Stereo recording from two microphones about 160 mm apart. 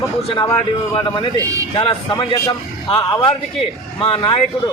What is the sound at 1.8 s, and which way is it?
A man's voice, 30° left (ahead or behind).